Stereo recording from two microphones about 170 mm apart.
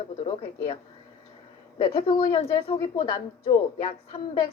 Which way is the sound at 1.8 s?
30° left (ahead or behind).